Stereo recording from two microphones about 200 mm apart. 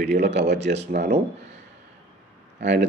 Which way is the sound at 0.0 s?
60° right (ahead or behind).